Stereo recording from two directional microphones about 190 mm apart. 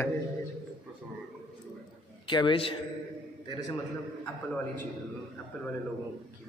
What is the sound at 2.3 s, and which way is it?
Speech, 25° left (ahead or behind).